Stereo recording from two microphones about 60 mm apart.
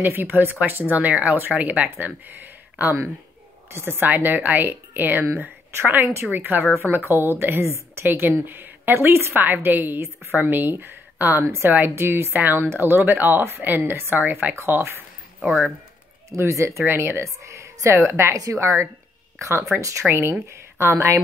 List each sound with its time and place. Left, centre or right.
0.0 s a woman's voice: right
8.1 s a woman's voice: right
11.4 s a woman's voice: right
14.5 s a woman's voice: right
16.3 s speech: right
16.8 s a woman's voice: right
20.1 s a woman's voice: right